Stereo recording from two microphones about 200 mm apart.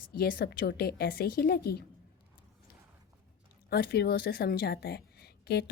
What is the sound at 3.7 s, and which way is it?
Speech, 50° left (ahead or behind).